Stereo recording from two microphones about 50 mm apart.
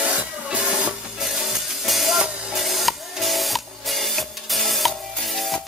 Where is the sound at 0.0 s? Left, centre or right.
Right.